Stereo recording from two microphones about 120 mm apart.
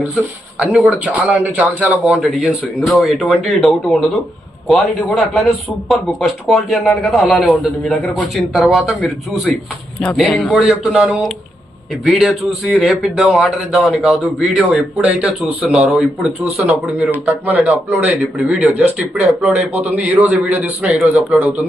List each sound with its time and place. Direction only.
1.0 s a man's voice: 10° right (ahead or behind)
2.3 s speech: centre (ahead or behind)
17.5 s a man's voice: 5° right (ahead or behind)
19.5 s a man's voice: 65° right (ahead or behind)
19.9 s a man's voice: 15° right (ahead or behind)